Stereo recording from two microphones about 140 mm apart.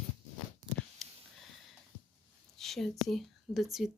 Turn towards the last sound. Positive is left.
turn(degrees=0)  # may be behind; listen again after turning